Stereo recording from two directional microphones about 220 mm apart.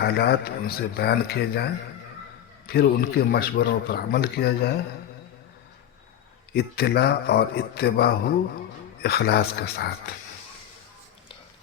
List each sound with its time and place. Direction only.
0.0 s speech: 45° left (ahead or behind)
2.7 s speech: 45° left (ahead or behind)
6.5 s speech: 45° left (ahead or behind)